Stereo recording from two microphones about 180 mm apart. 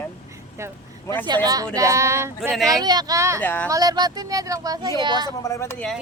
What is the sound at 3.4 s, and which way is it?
Speech, 10° left (ahead or behind).